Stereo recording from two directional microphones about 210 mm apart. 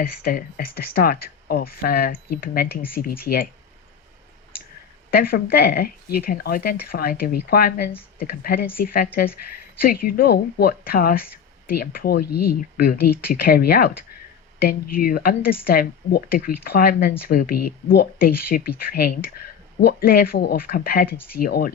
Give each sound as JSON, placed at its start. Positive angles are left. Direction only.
{"t": 0.0, "sound": "speech", "side_deg": 45}
{"t": 5.1, "sound": "speech", "side_deg": 45}